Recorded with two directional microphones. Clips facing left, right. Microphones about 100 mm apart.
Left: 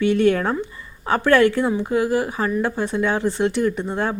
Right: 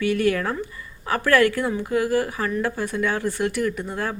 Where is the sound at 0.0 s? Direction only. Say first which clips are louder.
Left 4 dB; 25° left (ahead or behind).